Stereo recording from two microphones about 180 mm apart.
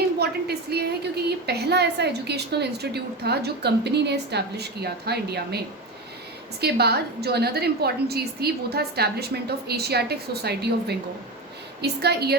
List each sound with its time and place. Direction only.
0.2 s a woman's voice: 65° right (ahead or behind)
6.6 s a woman's voice: 60° right (ahead or behind)